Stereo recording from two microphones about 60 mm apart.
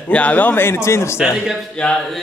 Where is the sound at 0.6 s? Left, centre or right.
Left.